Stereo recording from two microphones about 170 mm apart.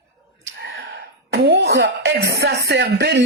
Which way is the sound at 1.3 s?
80° right.